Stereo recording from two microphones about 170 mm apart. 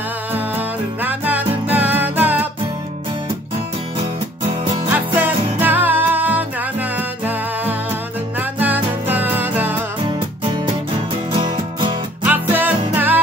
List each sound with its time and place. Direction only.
0.3 s music: 10° right (ahead or behind)
4.9 s music: 10° right (ahead or behind)
11.3 s music: 30° right (ahead or behind)
12.2 s music: 10° right (ahead or behind)